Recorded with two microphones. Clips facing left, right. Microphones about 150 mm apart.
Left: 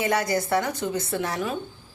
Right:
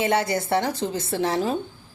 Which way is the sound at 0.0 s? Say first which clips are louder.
Right 1 dB; 25° right (ahead or behind).